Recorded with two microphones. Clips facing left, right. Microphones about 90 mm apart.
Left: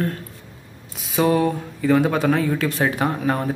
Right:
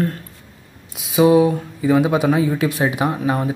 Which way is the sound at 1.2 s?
10° right (ahead or behind).